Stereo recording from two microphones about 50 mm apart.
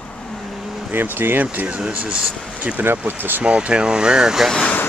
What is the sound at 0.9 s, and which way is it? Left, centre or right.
Speech, right.